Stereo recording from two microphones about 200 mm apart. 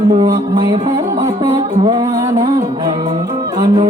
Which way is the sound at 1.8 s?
15° right (ahead or behind).